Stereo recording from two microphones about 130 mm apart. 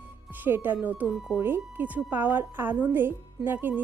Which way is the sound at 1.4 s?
15° right (ahead or behind).